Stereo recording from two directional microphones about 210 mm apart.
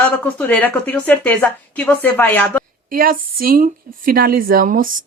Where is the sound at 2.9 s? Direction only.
45° right (ahead or behind).